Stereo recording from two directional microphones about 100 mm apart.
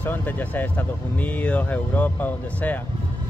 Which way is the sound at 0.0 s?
15° left (ahead or behind).